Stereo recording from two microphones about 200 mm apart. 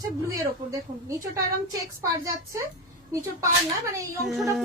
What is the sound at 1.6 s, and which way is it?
Speech, 15° right (ahead or behind).